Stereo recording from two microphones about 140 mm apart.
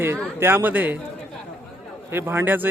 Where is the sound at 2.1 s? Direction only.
15° right (ahead or behind).